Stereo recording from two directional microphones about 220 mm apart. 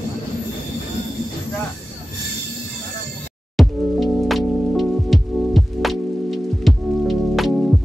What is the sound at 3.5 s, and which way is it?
Music, centre (ahead or behind).